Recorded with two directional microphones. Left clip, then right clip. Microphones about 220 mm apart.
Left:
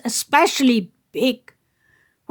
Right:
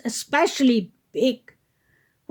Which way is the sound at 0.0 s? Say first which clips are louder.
Left 5 dB; 25° left (ahead or behind).